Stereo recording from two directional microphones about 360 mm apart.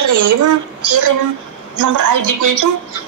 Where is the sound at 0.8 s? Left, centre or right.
Right.